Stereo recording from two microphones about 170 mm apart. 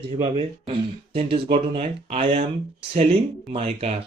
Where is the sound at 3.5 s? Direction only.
35° right (ahead or behind).